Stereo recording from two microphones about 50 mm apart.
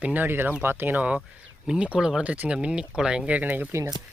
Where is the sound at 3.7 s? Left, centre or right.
Right.